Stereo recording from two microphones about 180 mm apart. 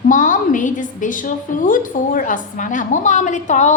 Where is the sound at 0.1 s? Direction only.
45° left (ahead or behind).